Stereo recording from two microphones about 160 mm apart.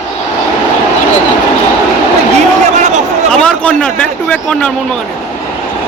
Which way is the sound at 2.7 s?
50° right (ahead or behind).